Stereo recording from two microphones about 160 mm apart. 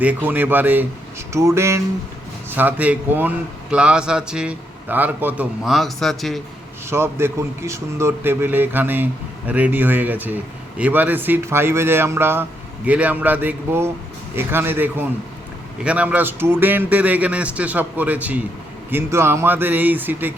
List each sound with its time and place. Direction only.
0.0 s a man's voice: 10° right (ahead or behind)
6.9 s a man's voice: 15° right (ahead or behind)